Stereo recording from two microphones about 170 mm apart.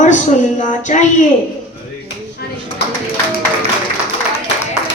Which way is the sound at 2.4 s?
70° left (ahead or behind).